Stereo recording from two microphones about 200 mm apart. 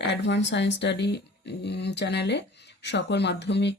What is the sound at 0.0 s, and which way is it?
Speech, 60° left (ahead or behind).